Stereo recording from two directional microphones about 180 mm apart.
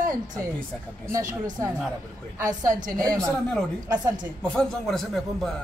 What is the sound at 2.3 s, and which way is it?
A woman's voice, 20° right (ahead or behind).